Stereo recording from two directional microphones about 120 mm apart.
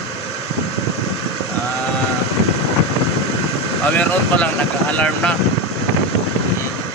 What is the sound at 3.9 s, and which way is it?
Speech, 10° left (ahead or behind).